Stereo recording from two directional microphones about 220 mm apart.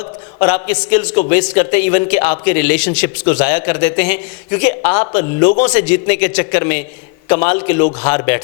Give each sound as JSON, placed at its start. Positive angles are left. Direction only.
{"t": 0.3, "sound": "a man's voice", "side_deg": 15}